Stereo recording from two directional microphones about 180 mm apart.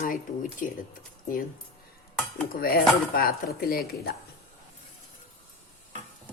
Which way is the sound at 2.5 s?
55° left (ahead or behind).